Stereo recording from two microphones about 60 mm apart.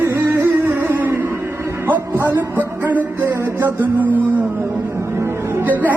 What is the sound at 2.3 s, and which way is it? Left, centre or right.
Music, right.